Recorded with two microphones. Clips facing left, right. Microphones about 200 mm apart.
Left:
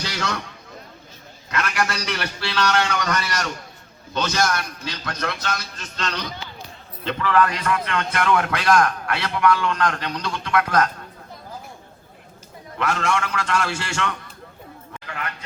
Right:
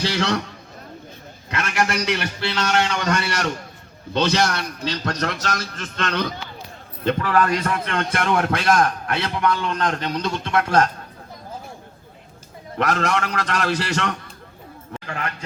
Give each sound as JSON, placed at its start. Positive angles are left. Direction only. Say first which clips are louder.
{"t": 0.0, "sound": "a man's voice", "louder": "right 6 dB", "side_deg": -30}
{"t": 1.5, "sound": "a man's voice", "louder": "right 1 dB", "side_deg": -25}
{"t": 12.7, "sound": "a man's voice", "louder": "right 2 dB", "side_deg": -40}